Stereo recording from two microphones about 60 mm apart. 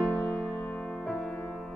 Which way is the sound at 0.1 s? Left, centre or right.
Left.